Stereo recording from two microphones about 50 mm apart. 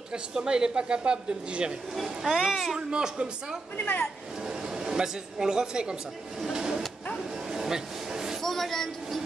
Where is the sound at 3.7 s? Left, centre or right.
Left.